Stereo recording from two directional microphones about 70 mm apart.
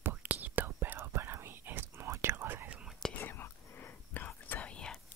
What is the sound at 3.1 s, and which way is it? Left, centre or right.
Whispering, left.